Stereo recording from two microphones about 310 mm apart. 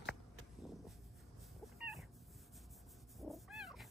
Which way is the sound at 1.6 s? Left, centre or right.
Centre.